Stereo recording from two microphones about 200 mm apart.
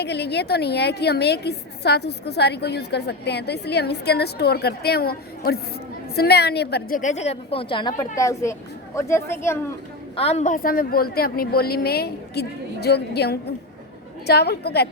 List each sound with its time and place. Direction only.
0.0 s a woman's voice: 55° left (ahead or behind); by 9.6 s 15° left (ahead or behind)
10.2 s a woman's voice: 30° left (ahead or behind); by 14.8 s 55° left (ahead or behind)